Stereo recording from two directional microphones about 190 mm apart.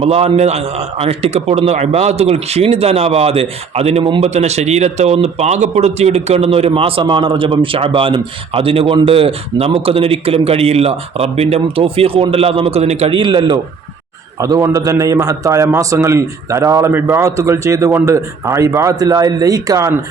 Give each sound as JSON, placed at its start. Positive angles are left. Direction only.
{"t": 0.0, "sound": "a man's voice", "side_deg": -30}